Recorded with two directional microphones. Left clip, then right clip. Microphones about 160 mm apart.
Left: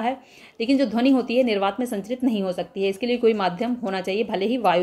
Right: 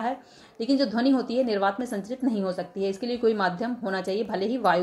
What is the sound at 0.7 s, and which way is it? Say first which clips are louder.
Speech: left 3 dB; 55° left (ahead or behind).